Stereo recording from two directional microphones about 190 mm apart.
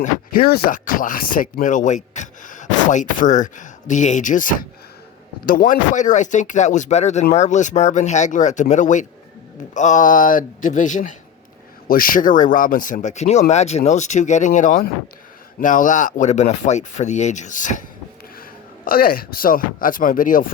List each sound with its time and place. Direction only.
0.0 s speech: 50° left (ahead or behind)
18.9 s speech: 50° left (ahead or behind)